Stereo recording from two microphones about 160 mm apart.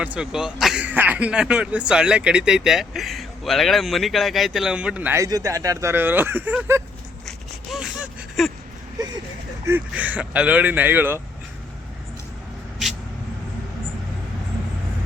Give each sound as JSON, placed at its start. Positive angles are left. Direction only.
{"t": 0.0, "sound": "speech", "side_deg": -5}
{"t": 5.2, "sound": "speech", "side_deg": -20}
{"t": 7.3, "sound": "a sound", "side_deg": -5}
{"t": 9.6, "sound": "speech", "side_deg": -10}